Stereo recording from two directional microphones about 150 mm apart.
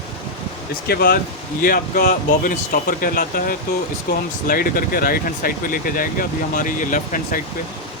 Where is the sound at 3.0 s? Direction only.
70° left (ahead or behind).